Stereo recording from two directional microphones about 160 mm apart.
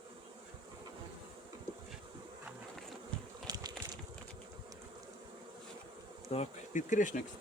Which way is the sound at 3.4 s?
25° right (ahead or behind).